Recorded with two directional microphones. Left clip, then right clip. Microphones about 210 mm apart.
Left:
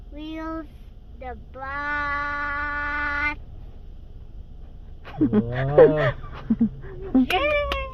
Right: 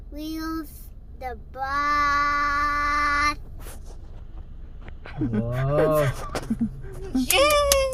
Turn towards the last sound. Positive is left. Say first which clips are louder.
# right 5 dB
turn(degrees=10)  # may be behind; listen again after turning